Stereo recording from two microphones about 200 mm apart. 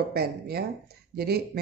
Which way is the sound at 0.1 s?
50° right (ahead or behind).